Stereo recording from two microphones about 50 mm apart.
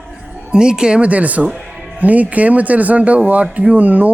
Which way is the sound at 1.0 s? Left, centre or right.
Right.